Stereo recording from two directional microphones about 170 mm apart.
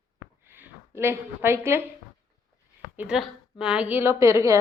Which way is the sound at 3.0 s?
5° right (ahead or behind).